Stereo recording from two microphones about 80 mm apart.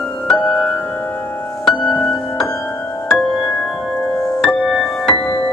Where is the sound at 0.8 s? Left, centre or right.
Left.